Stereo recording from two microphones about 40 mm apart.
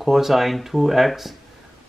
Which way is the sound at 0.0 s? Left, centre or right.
Centre.